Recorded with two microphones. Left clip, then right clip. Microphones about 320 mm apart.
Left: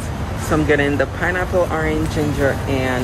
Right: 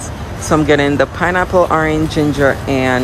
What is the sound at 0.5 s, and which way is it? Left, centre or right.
Speech, centre.